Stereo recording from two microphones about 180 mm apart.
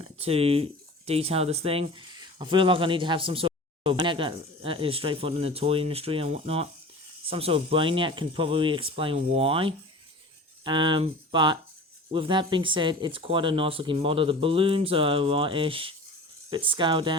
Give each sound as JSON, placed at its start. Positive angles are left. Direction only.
{"t": 0.2, "sound": "speech", "side_deg": -35}